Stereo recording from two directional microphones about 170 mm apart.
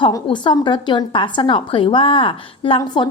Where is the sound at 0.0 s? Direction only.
30° left (ahead or behind).